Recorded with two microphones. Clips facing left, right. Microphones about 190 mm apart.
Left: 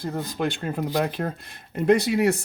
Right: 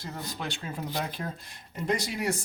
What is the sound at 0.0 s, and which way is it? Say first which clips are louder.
Speech: left 10 dB; 55° left (ahead or behind).